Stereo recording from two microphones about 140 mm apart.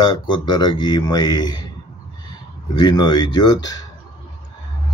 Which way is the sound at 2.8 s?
30° left (ahead or behind).